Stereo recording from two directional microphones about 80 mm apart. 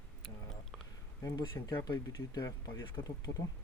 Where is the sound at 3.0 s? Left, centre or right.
Left.